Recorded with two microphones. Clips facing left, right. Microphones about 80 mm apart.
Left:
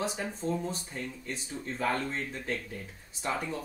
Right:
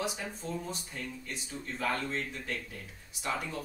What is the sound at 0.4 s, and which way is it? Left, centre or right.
Speech, left.